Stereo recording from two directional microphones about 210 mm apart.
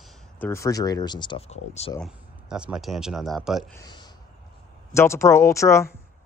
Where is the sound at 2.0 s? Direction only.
5° right (ahead or behind).